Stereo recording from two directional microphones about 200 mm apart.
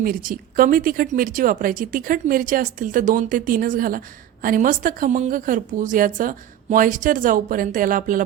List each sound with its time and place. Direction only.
0.0 s speech: 45° right (ahead or behind)